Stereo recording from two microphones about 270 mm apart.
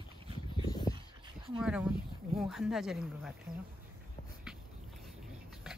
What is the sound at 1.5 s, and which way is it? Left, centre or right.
Speech, centre.